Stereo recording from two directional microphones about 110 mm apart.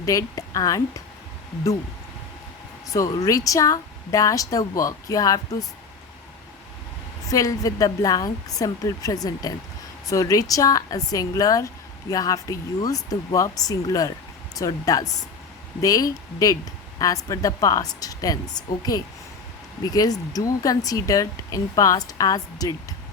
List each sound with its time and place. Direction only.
0.0 s a woman's voice: 30° left (ahead or behind)
2.9 s speech: 30° left (ahead or behind)
7.3 s speech: 30° left (ahead or behind)